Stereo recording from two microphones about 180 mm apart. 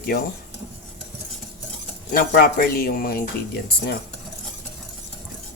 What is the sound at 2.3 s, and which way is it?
Speech, 55° left (ahead or behind).